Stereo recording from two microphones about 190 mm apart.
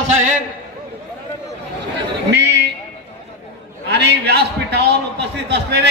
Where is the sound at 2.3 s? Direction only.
65° right (ahead or behind).